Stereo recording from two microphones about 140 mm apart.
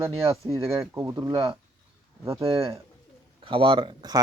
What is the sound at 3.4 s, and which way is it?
Speech, 40° right (ahead or behind).